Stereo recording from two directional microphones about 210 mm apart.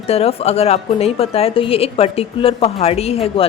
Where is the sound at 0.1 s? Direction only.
30° left (ahead or behind).